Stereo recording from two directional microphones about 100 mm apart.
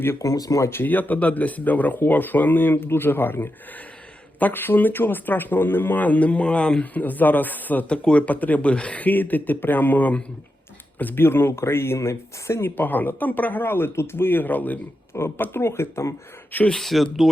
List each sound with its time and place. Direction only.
0.0 s speech: 30° left (ahead or behind)
0.7 s a man's voice: 20° left (ahead or behind)
16.7 s speech: centre (ahead or behind)